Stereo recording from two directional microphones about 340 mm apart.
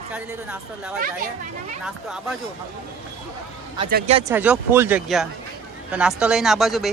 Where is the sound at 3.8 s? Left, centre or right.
Right.